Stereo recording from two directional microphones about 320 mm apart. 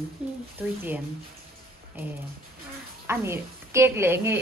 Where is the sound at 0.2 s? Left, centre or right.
Centre.